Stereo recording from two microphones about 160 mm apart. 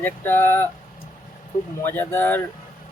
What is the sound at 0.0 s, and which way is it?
Speech, 15° left (ahead or behind).